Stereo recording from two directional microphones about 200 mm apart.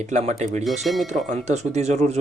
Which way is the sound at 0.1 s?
35° right (ahead or behind).